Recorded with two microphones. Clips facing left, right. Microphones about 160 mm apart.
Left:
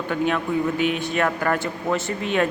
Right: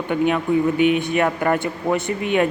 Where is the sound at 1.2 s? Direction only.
15° right (ahead or behind).